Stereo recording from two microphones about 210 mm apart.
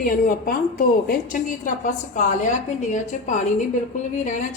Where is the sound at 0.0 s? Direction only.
40° left (ahead or behind).